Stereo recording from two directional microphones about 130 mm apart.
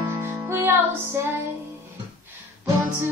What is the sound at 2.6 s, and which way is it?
Music, 25° right (ahead or behind).